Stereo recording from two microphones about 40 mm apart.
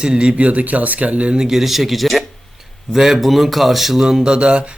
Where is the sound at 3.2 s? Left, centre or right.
Centre.